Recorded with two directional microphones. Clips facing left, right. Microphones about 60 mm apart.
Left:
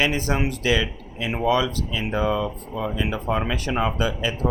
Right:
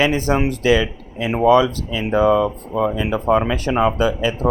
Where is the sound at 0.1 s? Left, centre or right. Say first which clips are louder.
Right 6 dB; right.